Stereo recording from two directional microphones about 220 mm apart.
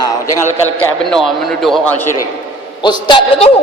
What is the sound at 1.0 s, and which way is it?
Speech, centre (ahead or behind).